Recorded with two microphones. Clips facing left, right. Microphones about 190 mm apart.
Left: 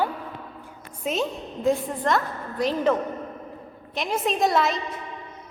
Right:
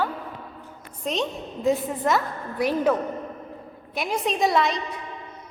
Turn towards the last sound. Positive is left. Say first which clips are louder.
# even
turn(degrees=0)  # may be behind; listen again after turning